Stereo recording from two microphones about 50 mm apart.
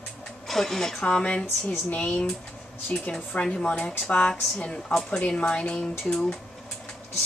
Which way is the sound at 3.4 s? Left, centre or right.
Centre.